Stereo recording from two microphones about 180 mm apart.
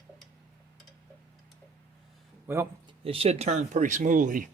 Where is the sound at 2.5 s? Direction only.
10° right (ahead or behind).